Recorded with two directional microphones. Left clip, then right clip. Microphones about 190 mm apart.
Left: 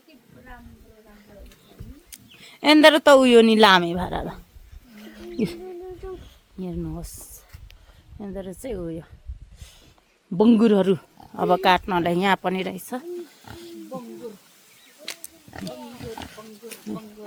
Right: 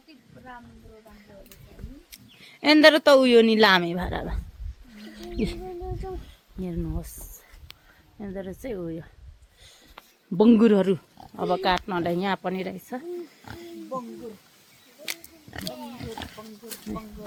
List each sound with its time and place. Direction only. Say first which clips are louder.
2.4 s a woman's voice: left 2 dB; 20° left (ahead or behind)
6.6 s speech: left 1 dB; 15° left (ahead or behind)
8.2 s speech: left 1 dB; 15° left (ahead or behind)
10.3 s speech: left 1 dB; 5° left (ahead or behind)
11.3 s speech: left 5 dB; 35° left (ahead or behind)
15.0 s pig: right 2 dB; 10° right (ahead or behind)